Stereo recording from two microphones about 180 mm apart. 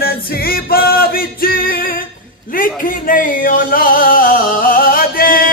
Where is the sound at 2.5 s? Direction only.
50° left (ahead or behind).